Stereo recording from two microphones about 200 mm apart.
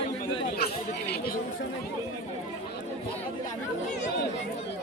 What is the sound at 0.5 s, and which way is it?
Chatter, 50° left (ahead or behind).